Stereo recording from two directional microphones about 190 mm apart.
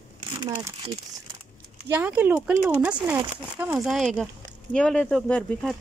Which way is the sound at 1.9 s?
10° right (ahead or behind).